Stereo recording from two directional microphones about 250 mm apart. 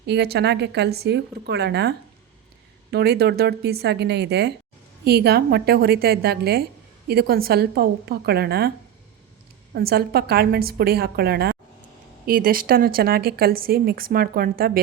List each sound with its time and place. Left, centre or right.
0.0 s speech: right
9.7 s speech: right